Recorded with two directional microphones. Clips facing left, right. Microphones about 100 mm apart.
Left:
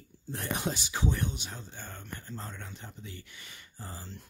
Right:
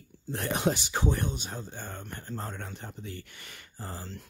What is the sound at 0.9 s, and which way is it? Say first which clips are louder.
Speech: right 3 dB; 45° right (ahead or behind).